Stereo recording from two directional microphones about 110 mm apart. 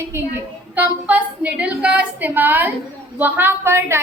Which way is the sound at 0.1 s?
20° right (ahead or behind).